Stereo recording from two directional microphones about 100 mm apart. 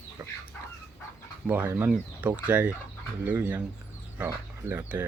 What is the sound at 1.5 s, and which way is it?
Speech, 20° right (ahead or behind).